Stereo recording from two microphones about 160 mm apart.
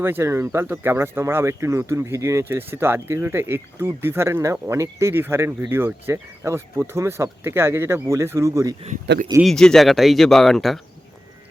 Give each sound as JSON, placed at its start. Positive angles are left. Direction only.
{"t": 0.0, "sound": "speech", "side_deg": -15}
{"t": 9.4, "sound": "speech", "side_deg": 5}